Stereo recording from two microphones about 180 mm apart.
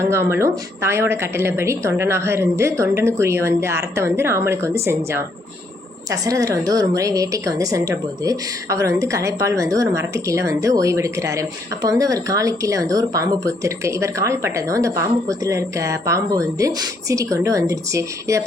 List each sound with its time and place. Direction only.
0.0 s a woman's voice: 15° right (ahead or behind)